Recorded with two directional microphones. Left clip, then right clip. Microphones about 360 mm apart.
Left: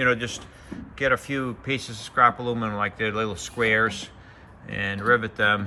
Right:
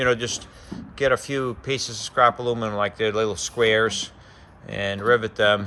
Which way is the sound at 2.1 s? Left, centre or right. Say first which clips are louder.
Right 1 dB; centre.